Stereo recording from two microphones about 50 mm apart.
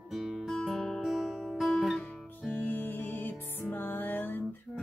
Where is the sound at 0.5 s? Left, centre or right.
Centre.